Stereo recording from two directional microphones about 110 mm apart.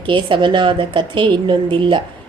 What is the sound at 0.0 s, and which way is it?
A woman's voice, 50° right (ahead or behind).